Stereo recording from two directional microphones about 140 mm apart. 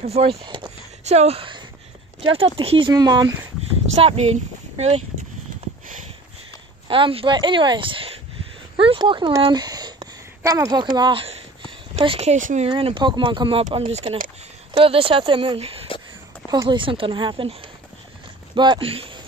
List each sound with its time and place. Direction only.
0.0 s speech: 45° right (ahead or behind)
1.0 s speech: 50° right (ahead or behind)
2.9 s speech: 30° right (ahead or behind)
3.9 s speech: 50° right (ahead or behind)
6.9 s a woman's voice: 40° right (ahead or behind)
11.0 s speech: 40° right (ahead or behind); by 12.6 s 60° right (ahead or behind)
12.6 s speech: 40° right (ahead or behind)